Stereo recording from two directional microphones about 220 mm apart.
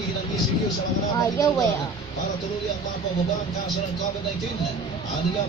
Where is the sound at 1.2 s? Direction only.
15° left (ahead or behind).